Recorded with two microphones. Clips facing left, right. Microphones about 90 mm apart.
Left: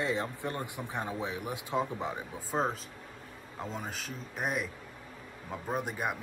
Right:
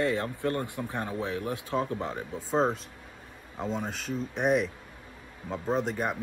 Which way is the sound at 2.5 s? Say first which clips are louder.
Right 5 dB; centre (ahead or behind).